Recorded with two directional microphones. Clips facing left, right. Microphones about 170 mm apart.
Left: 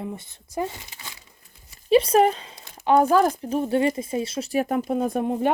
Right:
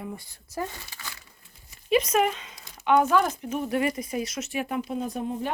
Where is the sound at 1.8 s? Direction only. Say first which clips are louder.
Left 6 dB; 30° left (ahead or behind); by 5.5 s 60° left (ahead or behind).